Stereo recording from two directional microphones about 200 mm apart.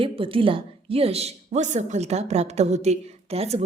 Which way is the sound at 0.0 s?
25° right (ahead or behind).